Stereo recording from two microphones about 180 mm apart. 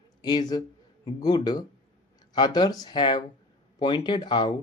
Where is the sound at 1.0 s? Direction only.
25° left (ahead or behind).